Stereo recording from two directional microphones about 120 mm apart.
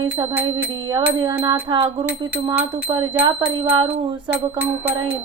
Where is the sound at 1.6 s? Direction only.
40° right (ahead or behind).